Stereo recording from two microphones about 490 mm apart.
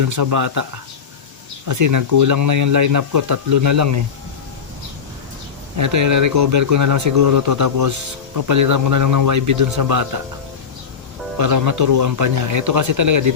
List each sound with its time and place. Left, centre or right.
0.0 s speech: right
1.6 s speech: right
5.7 s speech: right
11.3 s speech: right